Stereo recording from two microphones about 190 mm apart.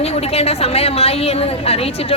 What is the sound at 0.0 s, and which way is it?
A woman's voice, 30° left (ahead or behind).